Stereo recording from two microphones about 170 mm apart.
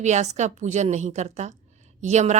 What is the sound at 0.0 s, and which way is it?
Speech, 45° right (ahead or behind).